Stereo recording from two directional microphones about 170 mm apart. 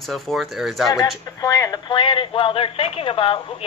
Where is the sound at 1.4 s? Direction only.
20° left (ahead or behind).